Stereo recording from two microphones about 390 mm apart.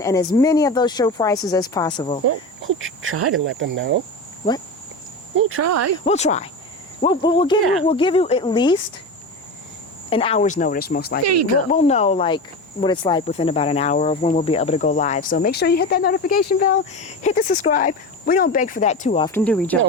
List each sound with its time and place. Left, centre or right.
0.0 s speech: centre
2.2 s speech: right
5.4 s speech: right
6.1 s speech: centre
10.1 s speech: centre
11.2 s speech: right
11.7 s speech: centre